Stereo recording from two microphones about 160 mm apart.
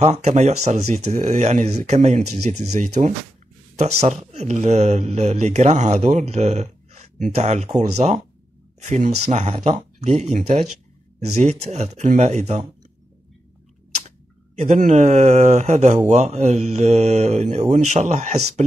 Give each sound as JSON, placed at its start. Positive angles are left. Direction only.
{"t": 0.0, "sound": "speech", "side_deg": -45}
{"t": 14.0, "sound": "speech", "side_deg": -45}